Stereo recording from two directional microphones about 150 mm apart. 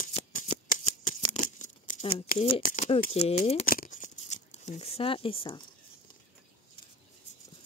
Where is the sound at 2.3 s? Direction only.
65° left (ahead or behind).